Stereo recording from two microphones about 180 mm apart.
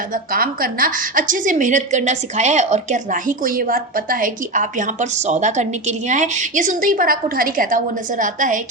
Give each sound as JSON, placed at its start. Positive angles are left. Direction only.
{"t": 0.1, "sound": "a woman's voice", "side_deg": -55}